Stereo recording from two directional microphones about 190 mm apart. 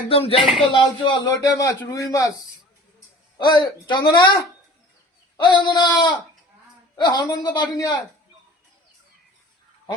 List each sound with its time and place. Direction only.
0.1 s speech: 30° left (ahead or behind)
0.4 s speech: centre (ahead or behind)
0.7 s a man's voice: 25° left (ahead or behind)
3.3 s a man's voice: 25° left (ahead or behind)
5.4 s a man's voice: 25° left (ahead or behind)